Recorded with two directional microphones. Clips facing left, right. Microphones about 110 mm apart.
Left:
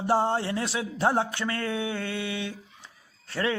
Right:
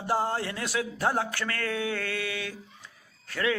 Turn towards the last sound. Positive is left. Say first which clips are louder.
# even
turn(degrees=30)  # may be behind; listen again after turning